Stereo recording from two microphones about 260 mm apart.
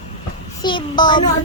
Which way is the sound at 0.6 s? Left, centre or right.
Centre.